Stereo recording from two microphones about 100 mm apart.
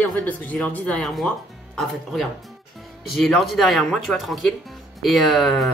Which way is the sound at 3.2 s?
Centre (ahead or behind).